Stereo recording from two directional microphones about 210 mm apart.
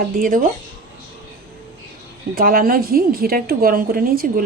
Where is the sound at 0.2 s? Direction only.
40° right (ahead or behind).